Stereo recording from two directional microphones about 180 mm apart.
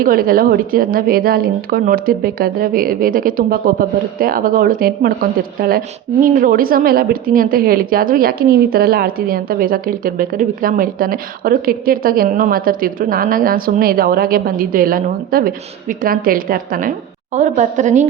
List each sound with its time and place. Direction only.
0.0 s a woman's voice: 55° right (ahead or behind)